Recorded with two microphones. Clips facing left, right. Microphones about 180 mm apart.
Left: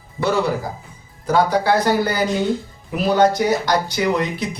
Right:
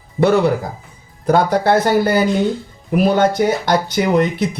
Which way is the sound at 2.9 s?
55° right (ahead or behind).